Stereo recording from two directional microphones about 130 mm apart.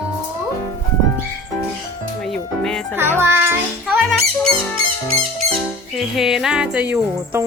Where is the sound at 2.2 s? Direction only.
5° left (ahead or behind).